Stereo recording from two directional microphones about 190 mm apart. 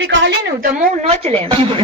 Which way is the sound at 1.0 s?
30° right (ahead or behind).